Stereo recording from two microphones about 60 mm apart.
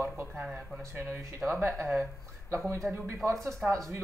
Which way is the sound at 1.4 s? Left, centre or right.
Centre.